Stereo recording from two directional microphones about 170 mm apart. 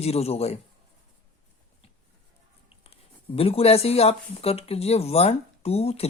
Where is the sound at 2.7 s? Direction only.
35° left (ahead or behind).